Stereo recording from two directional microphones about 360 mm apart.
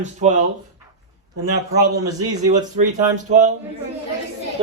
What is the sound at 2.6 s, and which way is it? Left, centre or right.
Speech, right.